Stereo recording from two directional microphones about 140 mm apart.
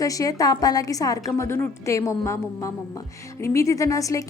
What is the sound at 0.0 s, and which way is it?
A woman's voice, 25° left (ahead or behind).